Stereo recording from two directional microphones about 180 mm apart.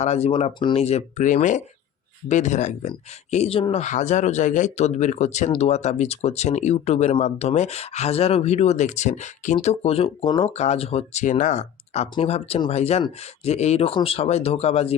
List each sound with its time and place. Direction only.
0.0 s speech: 35° left (ahead or behind)